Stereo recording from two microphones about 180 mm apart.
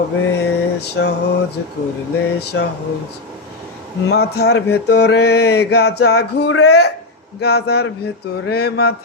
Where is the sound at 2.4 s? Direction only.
65° left (ahead or behind).